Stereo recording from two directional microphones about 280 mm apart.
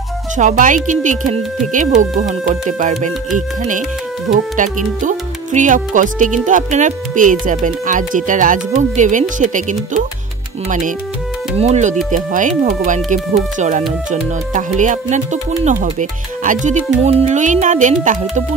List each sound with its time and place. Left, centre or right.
0.4 s speech: right
11.5 s speech: right